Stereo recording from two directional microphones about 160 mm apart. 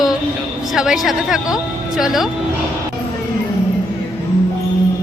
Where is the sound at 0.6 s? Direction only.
5° right (ahead or behind).